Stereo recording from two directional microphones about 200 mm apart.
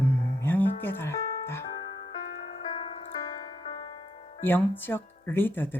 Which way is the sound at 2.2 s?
45° left (ahead or behind).